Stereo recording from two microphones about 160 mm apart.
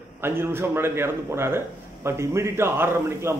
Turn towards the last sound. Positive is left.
turn(degrees=-15)  # may be behind; listen again after turning